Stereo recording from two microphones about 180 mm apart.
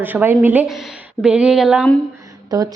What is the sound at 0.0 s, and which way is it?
A woman's voice, 10° right (ahead or behind).